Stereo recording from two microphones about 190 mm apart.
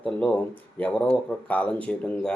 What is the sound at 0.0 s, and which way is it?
Speech, 5° left (ahead or behind).